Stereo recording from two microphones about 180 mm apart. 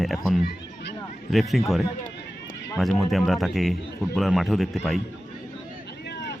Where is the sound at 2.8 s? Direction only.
Centre (ahead or behind).